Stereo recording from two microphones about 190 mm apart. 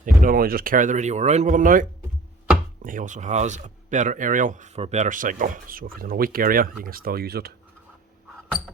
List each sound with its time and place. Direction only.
0.0 s speech: 45° right (ahead or behind)